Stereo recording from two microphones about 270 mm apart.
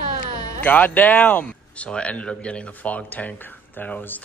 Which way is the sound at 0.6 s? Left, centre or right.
Centre.